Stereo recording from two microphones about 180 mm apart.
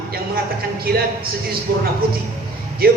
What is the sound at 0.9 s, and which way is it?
Speech, 60° right (ahead or behind).